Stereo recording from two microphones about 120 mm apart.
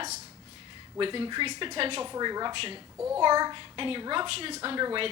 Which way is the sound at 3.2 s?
40° right (ahead or behind).